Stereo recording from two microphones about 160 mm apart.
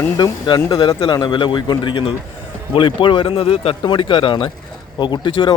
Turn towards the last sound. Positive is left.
turn(degrees=30)  # may be behind; listen again after turning